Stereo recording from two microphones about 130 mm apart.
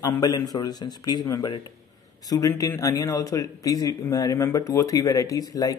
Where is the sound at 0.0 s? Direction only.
25° left (ahead or behind).